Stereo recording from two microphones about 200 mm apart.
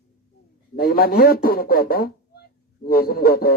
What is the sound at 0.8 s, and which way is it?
Speech, 50° left (ahead or behind).